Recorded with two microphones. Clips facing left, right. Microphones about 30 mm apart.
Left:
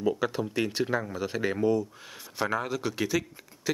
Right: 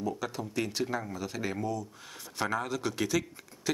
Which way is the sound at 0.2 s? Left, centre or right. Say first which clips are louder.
Left 5 dB; left.